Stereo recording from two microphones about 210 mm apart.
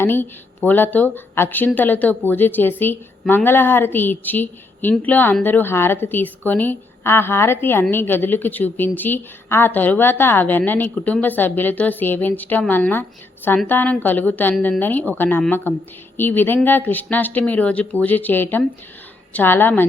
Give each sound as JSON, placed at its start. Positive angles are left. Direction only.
{"t": 0.0, "sound": "speech", "side_deg": 10}